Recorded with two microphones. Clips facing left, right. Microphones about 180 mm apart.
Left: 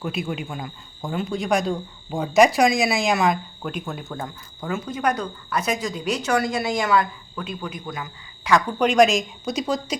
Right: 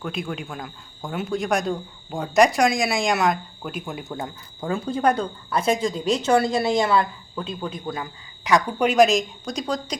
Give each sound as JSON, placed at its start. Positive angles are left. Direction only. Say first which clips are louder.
{"t": 0.0, "sound": "speech", "louder": "left 2 dB", "side_deg": 5}
{"t": 4.1, "sound": "speech", "louder": "right 1 dB", "side_deg": -20}
{"t": 8.4, "sound": "speech", "louder": "even", "side_deg": -15}